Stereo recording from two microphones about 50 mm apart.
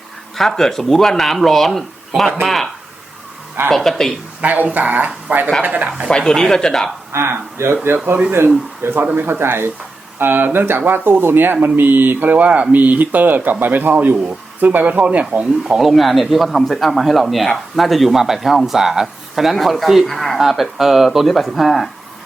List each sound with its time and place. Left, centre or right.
0.3 s speech: centre
3.7 s speech: centre
4.4 s a woman's voice: right
6.1 s speech: centre
7.1 s speech: right
8.8 s speech: right
15.6 s speech: centre